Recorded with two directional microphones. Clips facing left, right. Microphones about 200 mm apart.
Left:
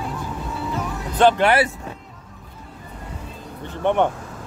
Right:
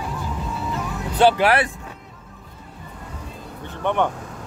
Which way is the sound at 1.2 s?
Centre (ahead or behind).